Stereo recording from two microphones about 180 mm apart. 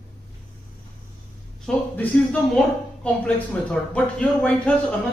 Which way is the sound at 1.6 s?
5° left (ahead or behind).